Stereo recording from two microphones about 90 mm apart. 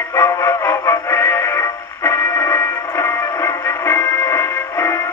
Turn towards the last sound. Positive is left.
turn(degrees=30)  # may be behind; listen again after turning